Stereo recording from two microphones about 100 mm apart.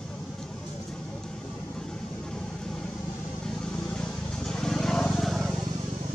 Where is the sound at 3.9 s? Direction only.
5° left (ahead or behind).